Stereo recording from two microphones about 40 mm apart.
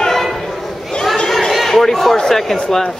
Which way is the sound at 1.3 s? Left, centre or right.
Centre.